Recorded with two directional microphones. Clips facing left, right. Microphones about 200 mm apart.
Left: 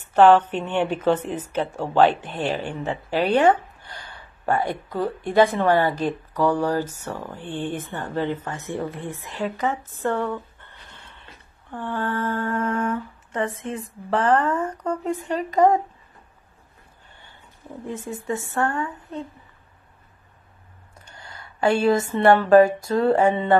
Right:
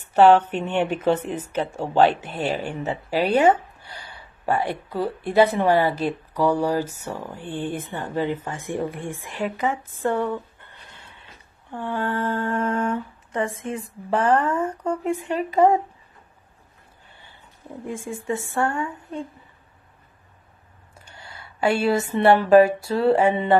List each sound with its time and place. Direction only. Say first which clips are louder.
0.1 s speech: even; 10° right (ahead or behind)
12.5 s humming: right 1 dB; 30° right (ahead or behind)
12.9 s speech: right 1 dB; 10° right (ahead or behind)
17.8 s speech: right 1 dB; 10° right (ahead or behind)
21.0 s speech: even; 10° right (ahead or behind)